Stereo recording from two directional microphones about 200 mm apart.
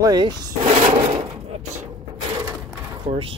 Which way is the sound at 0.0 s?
20° right (ahead or behind).